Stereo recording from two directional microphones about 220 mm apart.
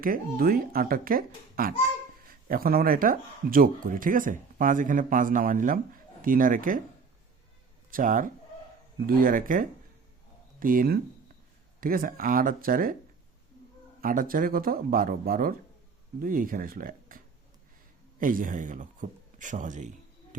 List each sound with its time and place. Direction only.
0.0 s speech: 40° right (ahead or behind)
7.9 s speech: 40° right (ahead or behind)
14.0 s speech: 40° right (ahead or behind)
18.2 s speech: 40° right (ahead or behind)